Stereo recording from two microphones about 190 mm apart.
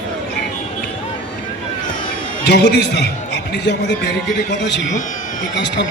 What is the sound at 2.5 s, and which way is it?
A man's voice, 60° left (ahead or behind).